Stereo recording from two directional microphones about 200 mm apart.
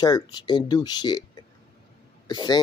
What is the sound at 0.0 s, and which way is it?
Speech, 20° left (ahead or behind).